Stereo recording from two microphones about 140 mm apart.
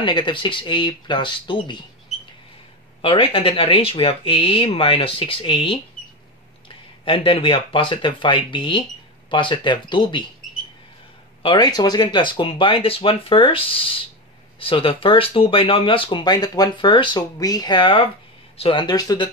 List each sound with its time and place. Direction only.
0.0 s speech: 35° left (ahead or behind)
3.0 s speech: 40° left (ahead or behind)
7.1 s speech: 40° left (ahead or behind)
11.4 s speech: 30° left (ahead or behind)